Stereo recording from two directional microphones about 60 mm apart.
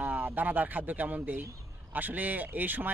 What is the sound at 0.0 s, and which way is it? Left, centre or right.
Speech, right.